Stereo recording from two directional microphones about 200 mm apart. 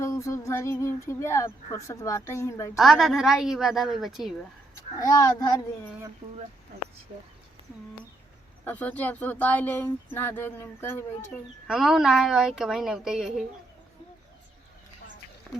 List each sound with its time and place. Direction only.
0.0 s speech: 15° left (ahead or behind)
2.7 s a woman's voice: centre (ahead or behind)
4.9 s speech: 20° left (ahead or behind)
8.6 s speech: 10° left (ahead or behind)
11.7 s a woman's voice: centre (ahead or behind)
15.5 s a sound: centre (ahead or behind)